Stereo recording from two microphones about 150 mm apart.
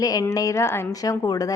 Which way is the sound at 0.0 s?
25° left (ahead or behind).